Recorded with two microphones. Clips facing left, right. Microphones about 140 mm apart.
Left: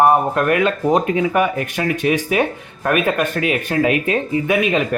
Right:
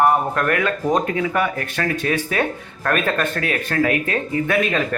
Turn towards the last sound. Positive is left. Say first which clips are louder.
# left 3 dB
turn(degrees=15)  # may be behind; listen again after turning